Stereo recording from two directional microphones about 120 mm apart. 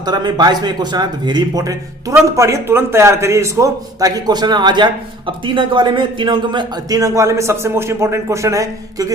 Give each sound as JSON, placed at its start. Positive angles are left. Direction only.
{"t": 0.0, "sound": "a man's voice", "side_deg": -35}